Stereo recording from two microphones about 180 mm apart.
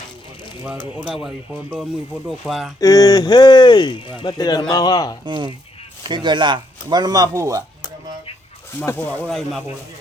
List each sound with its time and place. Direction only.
0.9 s speech: centre (ahead or behind)
2.8 s speech: 20° left (ahead or behind)
5.2 s speech: 25° right (ahead or behind)
8.8 s speech: 10° left (ahead or behind)
9.2 s speech: centre (ahead or behind)